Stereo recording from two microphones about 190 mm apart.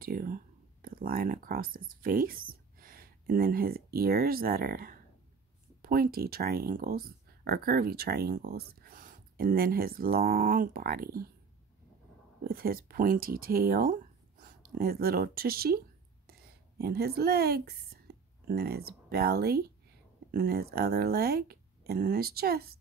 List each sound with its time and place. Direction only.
0.0 s speech: 50° right (ahead or behind)
12.4 s speech: 50° right (ahead or behind)